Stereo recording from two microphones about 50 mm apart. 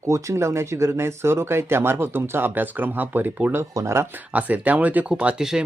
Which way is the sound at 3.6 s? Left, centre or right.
Right.